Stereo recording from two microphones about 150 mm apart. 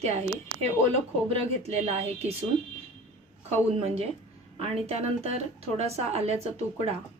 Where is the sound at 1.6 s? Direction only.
45° right (ahead or behind).